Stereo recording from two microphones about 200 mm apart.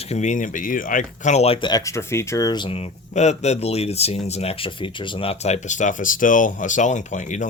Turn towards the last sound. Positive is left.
turn(degrees=35)  # may be behind; listen again after turning